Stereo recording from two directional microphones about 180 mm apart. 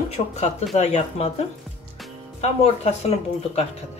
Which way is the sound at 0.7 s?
40° left (ahead or behind).